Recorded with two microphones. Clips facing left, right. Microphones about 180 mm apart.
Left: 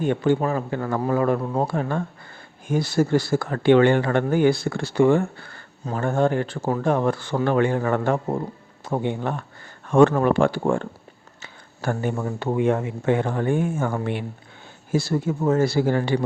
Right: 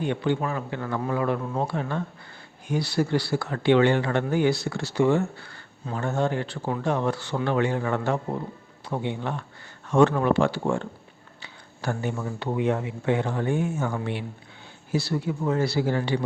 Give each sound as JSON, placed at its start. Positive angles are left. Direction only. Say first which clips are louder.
{"t": 0.0, "sound": "speech", "louder": "left 5 dB", "side_deg": 45}